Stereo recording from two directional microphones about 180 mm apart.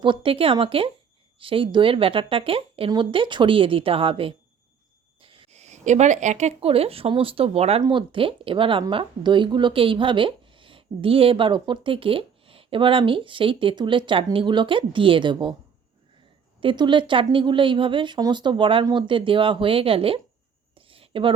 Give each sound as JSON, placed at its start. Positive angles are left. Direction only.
{"t": 0.0, "sound": "speech", "side_deg": -30}
{"t": 16.6, "sound": "speech", "side_deg": -25}
{"t": 20.7, "sound": "a sound", "side_deg": -30}